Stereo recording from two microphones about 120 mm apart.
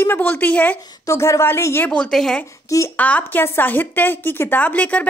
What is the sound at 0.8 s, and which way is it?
A woman's voice, 25° left (ahead or behind).